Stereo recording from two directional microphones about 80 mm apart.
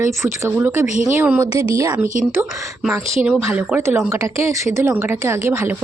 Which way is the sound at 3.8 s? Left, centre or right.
Right.